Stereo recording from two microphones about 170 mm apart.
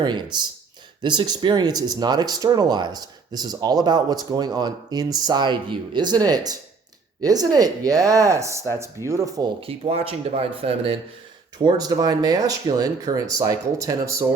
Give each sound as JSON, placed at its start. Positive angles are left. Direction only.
{"t": 0.0, "sound": "speech", "side_deg": -25}
{"t": 9.6, "sound": "speech", "side_deg": -35}
{"t": 11.6, "sound": "speech", "side_deg": -20}